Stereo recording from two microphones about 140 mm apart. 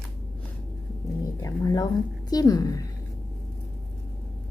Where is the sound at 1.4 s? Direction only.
25° left (ahead or behind).